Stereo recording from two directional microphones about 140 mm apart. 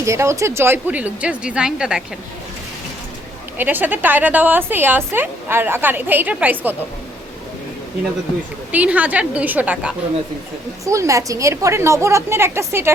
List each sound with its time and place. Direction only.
0.0 s a woman's voice: 20° right (ahead or behind); by 2.0 s 5° right (ahead or behind)
3.6 s a woman's voice: 15° right (ahead or behind)
8.7 s a woman's voice: 10° right (ahead or behind)
10.8 s a woman's voice: 20° right (ahead or behind)